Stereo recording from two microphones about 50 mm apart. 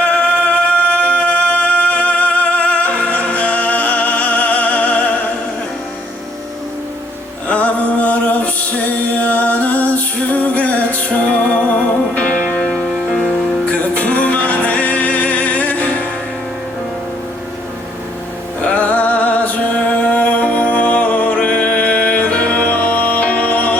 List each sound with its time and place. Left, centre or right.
0.0 s music: left
7.4 s music: left
12.6 s music: centre
13.7 s music: left
18.6 s music: left